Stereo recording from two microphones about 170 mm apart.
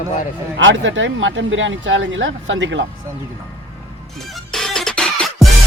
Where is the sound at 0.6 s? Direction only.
90° right.